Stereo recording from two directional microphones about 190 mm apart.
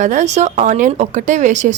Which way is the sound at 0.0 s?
40° right (ahead or behind).